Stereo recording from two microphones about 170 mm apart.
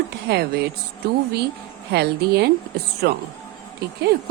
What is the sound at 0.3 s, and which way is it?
Speech, 80° right.